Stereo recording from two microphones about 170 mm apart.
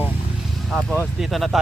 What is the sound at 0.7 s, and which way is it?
Speech, centre (ahead or behind).